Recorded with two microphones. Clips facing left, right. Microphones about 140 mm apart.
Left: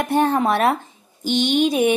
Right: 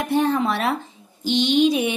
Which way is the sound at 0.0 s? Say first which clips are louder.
Left 2 dB; 50° left (ahead or behind).